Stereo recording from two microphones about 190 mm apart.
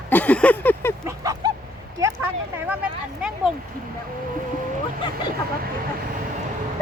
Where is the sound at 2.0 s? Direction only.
15° right (ahead or behind).